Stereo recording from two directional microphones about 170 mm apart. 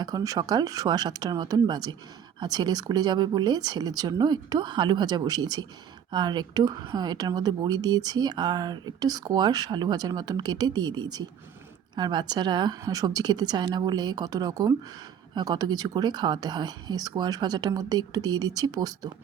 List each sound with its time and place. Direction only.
0.0 s speech: 20° right (ahead or behind)